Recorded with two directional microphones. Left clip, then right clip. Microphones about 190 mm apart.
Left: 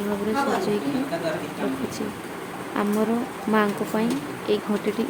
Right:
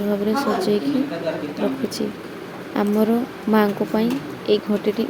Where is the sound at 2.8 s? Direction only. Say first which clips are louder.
Right 4 dB; 25° right (ahead or behind).